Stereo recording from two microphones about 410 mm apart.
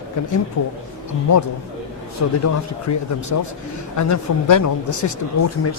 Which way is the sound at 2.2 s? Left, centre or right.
Left.